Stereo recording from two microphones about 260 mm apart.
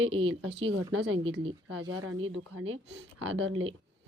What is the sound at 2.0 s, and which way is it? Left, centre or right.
Speech, right.